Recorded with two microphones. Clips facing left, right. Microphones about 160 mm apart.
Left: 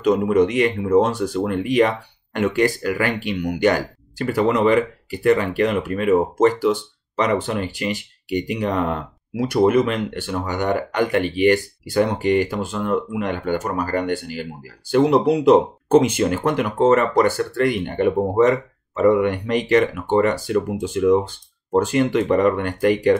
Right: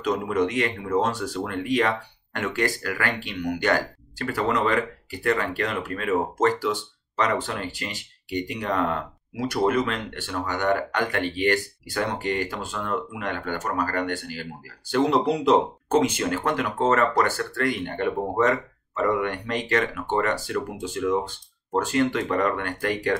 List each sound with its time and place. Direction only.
0.0 s speech: 15° left (ahead or behind)